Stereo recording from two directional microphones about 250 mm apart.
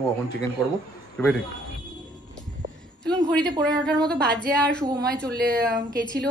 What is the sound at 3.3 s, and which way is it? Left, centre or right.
A woman's voice, centre.